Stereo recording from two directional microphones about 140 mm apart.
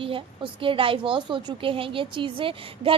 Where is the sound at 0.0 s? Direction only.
40° right (ahead or behind).